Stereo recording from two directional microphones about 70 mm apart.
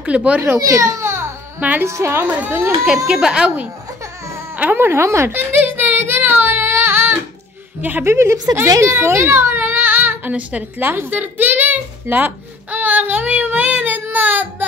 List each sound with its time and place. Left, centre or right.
0.0 s a child's voice: centre
0.6 s a child's voice: right
3.1 s speech: centre
4.6 s a woman's voice: right
5.3 s music: right
8.0 s a woman's voice: right
8.8 s a sound: right
10.3 s a woman's voice: centre
10.9 s speech: right
12.7 s child singing: right